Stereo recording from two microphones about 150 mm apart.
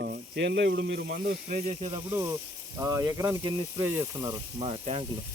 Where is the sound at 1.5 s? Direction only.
50° right (ahead or behind).